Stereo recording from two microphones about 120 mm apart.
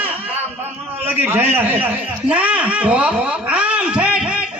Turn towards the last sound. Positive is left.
turn(degrees=-10)  # may be behind; listen again after turning